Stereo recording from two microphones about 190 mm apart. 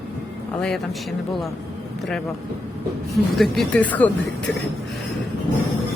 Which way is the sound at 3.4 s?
5° left (ahead or behind).